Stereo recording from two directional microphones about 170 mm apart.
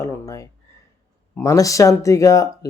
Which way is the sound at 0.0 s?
20° left (ahead or behind).